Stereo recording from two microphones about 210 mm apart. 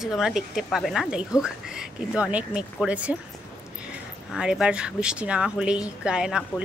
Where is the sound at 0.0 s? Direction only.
Centre (ahead or behind).